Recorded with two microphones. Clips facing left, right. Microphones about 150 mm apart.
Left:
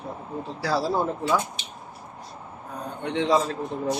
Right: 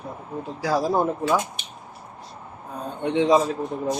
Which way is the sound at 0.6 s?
15° right (ahead or behind).